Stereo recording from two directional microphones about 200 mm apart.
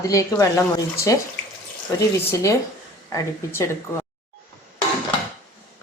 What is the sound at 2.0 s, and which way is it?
Speech, 15° left (ahead or behind).